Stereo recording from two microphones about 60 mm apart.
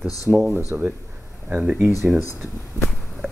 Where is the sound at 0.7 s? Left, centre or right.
Right.